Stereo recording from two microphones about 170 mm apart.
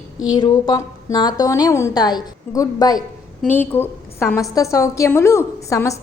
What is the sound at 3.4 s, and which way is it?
A woman's voice, 10° left (ahead or behind).